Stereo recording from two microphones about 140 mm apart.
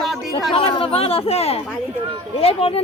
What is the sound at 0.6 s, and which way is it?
Speech, 40° left (ahead or behind).